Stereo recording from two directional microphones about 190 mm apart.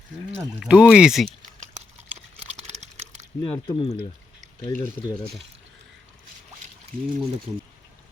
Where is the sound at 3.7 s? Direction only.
25° left (ahead or behind).